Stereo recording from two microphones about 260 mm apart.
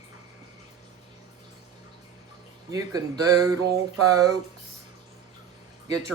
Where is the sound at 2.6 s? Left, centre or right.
Centre.